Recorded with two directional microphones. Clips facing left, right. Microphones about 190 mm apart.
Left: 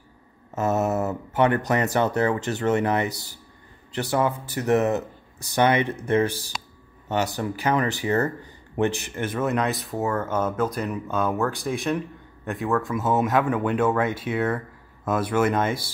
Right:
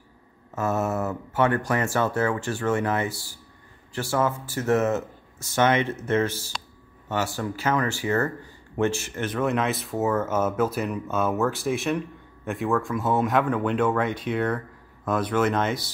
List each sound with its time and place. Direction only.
0.6 s speech: 20° left (ahead or behind)